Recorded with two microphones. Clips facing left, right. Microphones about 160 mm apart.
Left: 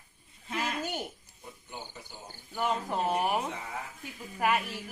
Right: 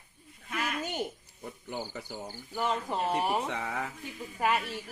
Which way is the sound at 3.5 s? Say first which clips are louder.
Right 5 dB; 75° right (ahead or behind).